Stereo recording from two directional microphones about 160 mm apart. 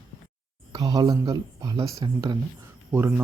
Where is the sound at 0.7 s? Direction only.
25° right (ahead or behind).